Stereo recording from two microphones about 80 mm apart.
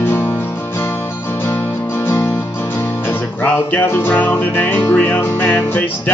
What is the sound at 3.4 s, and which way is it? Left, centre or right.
Music, left.